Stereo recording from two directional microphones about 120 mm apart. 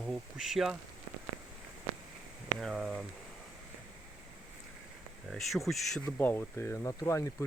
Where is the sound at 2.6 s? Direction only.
5° right (ahead or behind).